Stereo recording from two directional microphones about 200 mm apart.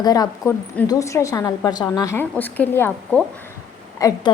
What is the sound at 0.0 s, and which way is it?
A woman's voice, 20° left (ahead or behind).